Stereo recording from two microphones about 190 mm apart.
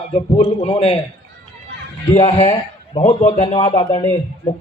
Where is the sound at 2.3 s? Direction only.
30° left (ahead or behind).